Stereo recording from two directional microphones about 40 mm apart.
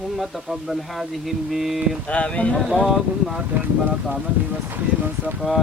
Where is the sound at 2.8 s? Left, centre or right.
Centre.